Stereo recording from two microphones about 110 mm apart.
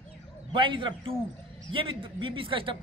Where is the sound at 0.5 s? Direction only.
50° right (ahead or behind).